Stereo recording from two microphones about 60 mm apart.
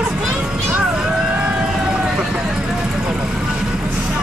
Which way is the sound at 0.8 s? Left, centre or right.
Centre.